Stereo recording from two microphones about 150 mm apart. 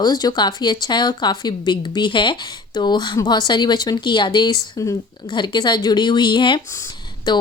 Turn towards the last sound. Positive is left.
turn(degrees=30)  # may be behind; listen again after turning